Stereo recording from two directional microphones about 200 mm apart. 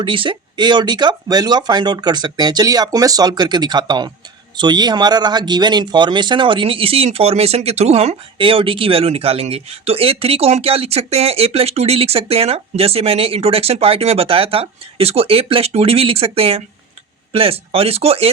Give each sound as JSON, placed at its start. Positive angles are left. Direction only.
{"t": 0.0, "sound": "speech", "side_deg": -25}